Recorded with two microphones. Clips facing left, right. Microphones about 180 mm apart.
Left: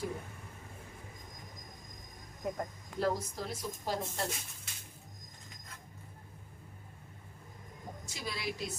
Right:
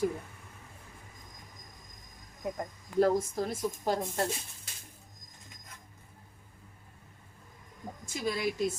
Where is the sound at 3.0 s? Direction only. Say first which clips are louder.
Right 7 dB; 50° right (ahead or behind).